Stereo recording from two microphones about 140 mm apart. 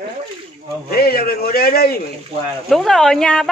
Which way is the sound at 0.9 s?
90° left.